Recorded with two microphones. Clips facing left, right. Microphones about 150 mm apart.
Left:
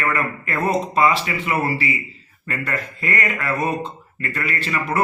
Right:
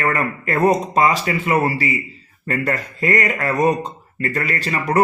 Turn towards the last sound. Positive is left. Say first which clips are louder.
# right 4 dB
turn(degrees=-40)  # may be behind; listen again after turning